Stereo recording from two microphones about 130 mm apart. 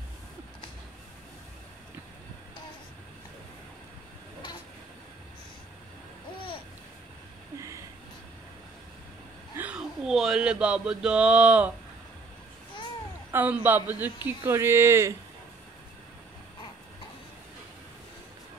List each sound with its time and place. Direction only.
9.6 s speech: 10° right (ahead or behind)
13.3 s a woman's voice: 15° right (ahead or behind)